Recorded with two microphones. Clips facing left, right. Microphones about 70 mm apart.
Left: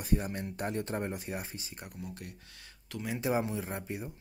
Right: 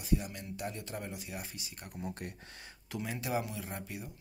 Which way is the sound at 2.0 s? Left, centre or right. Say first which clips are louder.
Right 3 dB; right.